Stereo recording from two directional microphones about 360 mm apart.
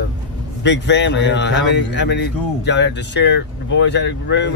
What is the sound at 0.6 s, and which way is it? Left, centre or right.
Speech, left.